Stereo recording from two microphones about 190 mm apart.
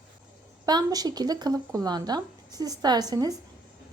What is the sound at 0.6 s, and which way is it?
Speech, 20° right (ahead or behind).